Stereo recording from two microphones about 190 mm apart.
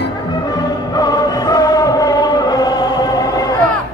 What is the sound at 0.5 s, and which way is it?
Music, 20° left (ahead or behind).